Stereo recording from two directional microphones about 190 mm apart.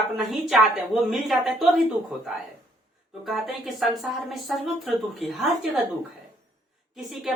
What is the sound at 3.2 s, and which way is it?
Speech, centre (ahead or behind).